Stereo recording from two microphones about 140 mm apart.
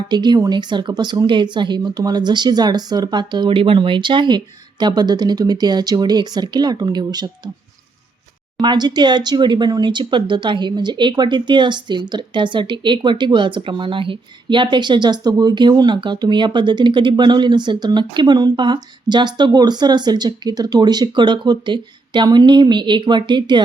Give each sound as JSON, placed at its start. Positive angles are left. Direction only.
{"t": 0.1, "sound": "speech", "side_deg": -30}
{"t": 8.6, "sound": "speech", "side_deg": -30}